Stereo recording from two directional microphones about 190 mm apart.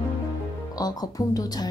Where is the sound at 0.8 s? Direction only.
20° left (ahead or behind).